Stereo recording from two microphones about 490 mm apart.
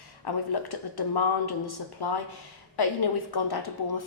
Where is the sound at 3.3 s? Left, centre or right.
Left.